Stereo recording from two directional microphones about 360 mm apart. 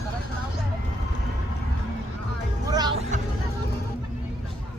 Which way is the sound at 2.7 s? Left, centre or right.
Centre.